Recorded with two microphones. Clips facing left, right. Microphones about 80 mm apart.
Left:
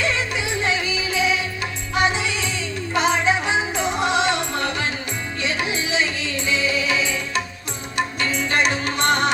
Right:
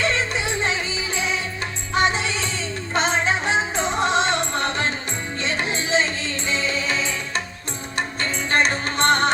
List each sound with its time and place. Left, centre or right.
0.0 s music: right